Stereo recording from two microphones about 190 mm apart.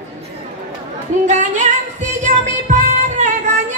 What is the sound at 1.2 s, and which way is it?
Female singing, 40° right (ahead or behind).